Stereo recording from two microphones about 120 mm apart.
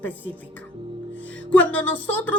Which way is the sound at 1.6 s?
10° left (ahead or behind).